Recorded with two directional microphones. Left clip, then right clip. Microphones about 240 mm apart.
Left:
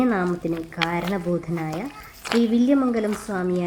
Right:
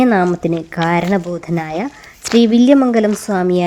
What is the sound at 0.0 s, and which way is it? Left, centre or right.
A woman's voice, right.